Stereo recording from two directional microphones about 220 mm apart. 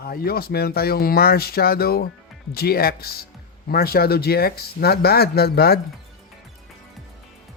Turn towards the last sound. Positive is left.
turn(degrees=45)  # may be behind; listen again after turning